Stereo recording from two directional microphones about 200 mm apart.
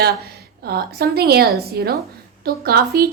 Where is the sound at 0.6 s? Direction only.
50° right (ahead or behind).